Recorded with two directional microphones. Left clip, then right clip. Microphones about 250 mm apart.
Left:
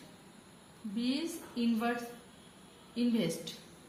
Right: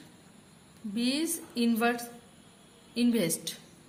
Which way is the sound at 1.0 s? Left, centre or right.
Right.